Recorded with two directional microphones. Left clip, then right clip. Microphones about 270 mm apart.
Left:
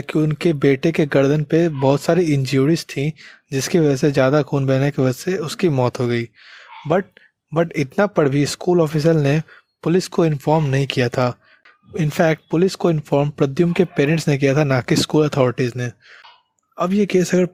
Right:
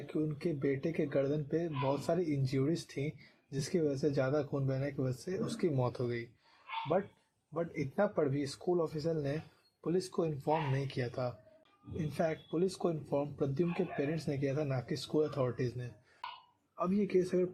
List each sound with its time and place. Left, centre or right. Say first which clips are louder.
0.1 s speech: left 18 dB; left
7.5 s speech: left 17 dB; left